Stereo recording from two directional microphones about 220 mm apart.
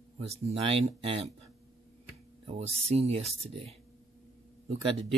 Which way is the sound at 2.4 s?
30° right (ahead or behind).